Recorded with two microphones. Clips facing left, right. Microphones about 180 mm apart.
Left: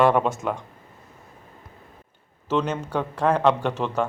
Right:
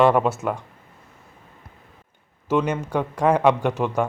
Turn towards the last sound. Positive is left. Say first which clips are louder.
# right 2 dB
turn(degrees=-10)  # may be behind; listen again after turning